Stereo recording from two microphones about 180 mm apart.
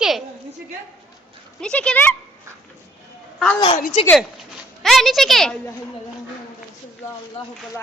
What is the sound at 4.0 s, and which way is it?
Speech, 30° left (ahead or behind).